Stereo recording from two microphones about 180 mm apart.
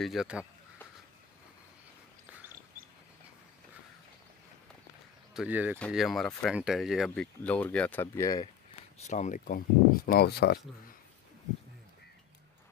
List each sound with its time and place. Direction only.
0.0 s speech: centre (ahead or behind)
5.3 s speech: 5° right (ahead or behind); by 8.5 s 20° left (ahead or behind)
9.0 s speech: 40° left (ahead or behind); by 10.6 s 60° left (ahead or behind)